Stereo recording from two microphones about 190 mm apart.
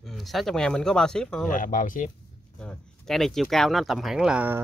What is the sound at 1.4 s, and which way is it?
Speech, 45° left (ahead or behind).